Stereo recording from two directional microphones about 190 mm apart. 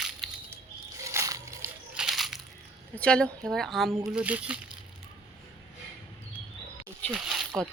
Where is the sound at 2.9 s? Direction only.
5° left (ahead or behind).